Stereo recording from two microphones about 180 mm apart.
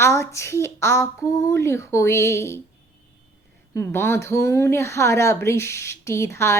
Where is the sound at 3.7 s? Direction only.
15° left (ahead or behind).